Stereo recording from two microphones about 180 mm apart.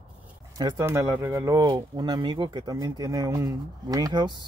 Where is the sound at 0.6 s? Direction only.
20° right (ahead or behind).